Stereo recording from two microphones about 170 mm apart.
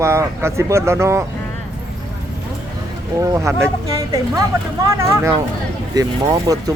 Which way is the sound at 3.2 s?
20° right (ahead or behind).